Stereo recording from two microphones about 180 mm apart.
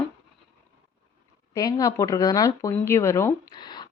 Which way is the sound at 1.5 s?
20° left (ahead or behind).